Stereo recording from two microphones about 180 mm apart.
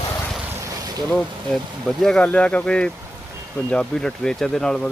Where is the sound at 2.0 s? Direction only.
5° left (ahead or behind).